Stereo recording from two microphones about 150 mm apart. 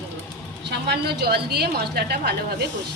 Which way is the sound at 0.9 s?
90° right.